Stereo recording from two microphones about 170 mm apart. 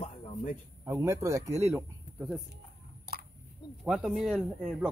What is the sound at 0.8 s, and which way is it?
Speech, 15° right (ahead or behind).